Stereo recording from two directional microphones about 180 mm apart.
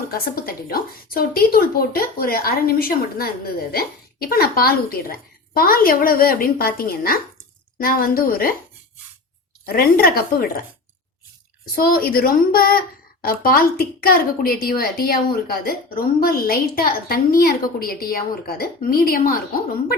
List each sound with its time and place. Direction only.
0.1 s a woman's voice: 55° left (ahead or behind)
9.6 s a woman's voice: 55° left (ahead or behind)
11.7 s a woman's voice: 55° left (ahead or behind)